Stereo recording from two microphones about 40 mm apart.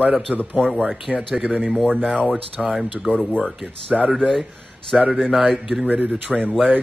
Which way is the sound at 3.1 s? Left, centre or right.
Right.